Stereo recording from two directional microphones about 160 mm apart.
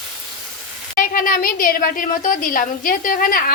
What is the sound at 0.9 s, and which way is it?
A woman's voice, 60° left (ahead or behind).